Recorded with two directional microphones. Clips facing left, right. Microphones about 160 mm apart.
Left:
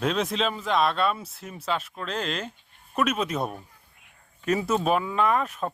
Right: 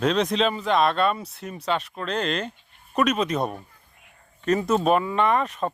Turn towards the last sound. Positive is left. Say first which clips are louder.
# right 2 dB
turn(degrees=0)  # may be behind; listen again after turning